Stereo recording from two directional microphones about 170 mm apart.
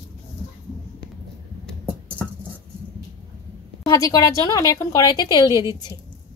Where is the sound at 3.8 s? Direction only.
20° left (ahead or behind).